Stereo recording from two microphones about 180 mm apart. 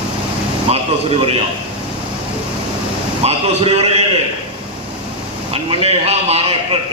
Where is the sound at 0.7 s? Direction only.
35° right (ahead or behind).